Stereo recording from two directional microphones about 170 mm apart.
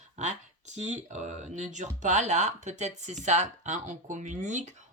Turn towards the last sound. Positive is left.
turn(degrees=-45)  # may be behind; listen again after turning